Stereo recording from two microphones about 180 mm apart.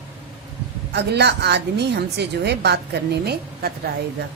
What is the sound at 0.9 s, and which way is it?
A woman's voice, 70° right (ahead or behind).